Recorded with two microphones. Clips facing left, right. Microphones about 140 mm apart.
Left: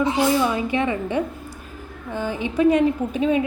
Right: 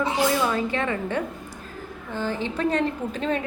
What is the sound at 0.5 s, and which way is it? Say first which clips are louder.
A woman's voice: left 3 dB; 15° left (ahead or behind).